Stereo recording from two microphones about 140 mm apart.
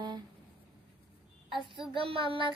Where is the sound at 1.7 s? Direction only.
35° right (ahead or behind).